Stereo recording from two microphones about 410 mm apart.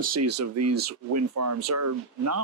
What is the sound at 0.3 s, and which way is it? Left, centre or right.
Speech, right.